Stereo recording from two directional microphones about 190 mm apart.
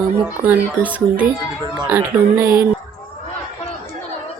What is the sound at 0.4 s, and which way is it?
Speech, 10° right (ahead or behind).